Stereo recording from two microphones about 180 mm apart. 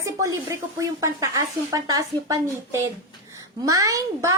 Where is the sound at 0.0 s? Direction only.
20° right (ahead or behind).